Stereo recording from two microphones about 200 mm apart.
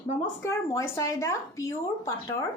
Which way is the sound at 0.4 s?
15° left (ahead or behind).